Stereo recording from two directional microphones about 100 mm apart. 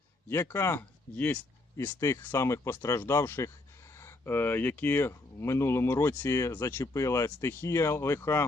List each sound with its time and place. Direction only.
0.3 s speech: 25° left (ahead or behind)
6.8 s speech: 30° left (ahead or behind)